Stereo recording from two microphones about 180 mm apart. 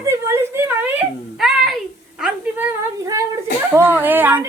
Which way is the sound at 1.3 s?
Centre (ahead or behind).